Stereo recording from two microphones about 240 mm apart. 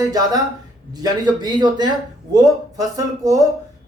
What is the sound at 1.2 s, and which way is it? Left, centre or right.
A man's voice, centre.